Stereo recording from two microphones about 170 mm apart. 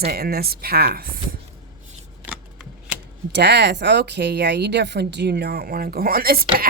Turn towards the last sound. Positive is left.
turn(degrees=-60)  # may be behind; listen again after turning